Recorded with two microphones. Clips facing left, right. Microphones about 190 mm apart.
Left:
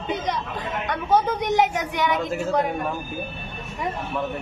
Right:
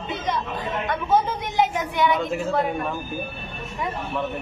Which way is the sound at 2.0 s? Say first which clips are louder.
Right 1 dB; 15° left (ahead or behind).